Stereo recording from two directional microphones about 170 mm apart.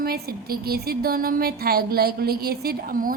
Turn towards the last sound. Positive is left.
turn(degrees=-55)  # may be behind; listen again after turning